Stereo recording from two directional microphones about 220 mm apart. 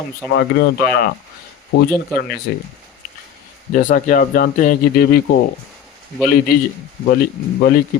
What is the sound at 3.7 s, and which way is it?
Speech, 35° left (ahead or behind).